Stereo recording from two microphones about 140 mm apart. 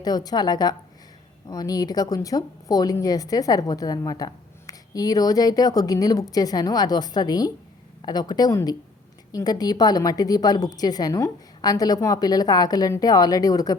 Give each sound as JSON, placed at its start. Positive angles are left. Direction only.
{"t": 0.0, "sound": "speech", "side_deg": 30}